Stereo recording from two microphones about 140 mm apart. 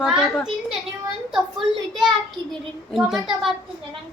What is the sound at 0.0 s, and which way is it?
A child's voice, centre (ahead or behind).